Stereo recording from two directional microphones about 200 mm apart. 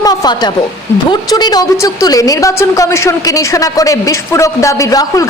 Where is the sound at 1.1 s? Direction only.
20° left (ahead or behind).